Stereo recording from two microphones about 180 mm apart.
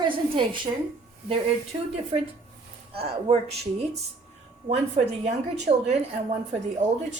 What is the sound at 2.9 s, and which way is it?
A woman's voice, 35° right (ahead or behind).